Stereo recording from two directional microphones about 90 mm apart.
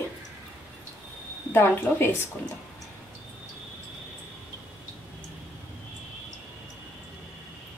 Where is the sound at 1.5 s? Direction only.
25° left (ahead or behind).